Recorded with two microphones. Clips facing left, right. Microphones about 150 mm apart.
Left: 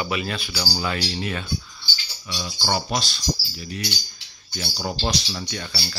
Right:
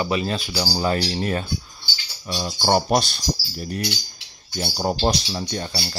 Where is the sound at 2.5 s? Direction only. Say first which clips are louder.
Right 7 dB; 50° right (ahead or behind).